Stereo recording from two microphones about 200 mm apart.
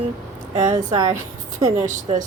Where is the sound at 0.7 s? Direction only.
15° right (ahead or behind).